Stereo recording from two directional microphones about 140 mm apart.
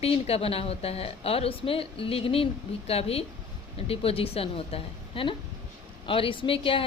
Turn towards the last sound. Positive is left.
turn(degrees=40)  # may be behind; listen again after turning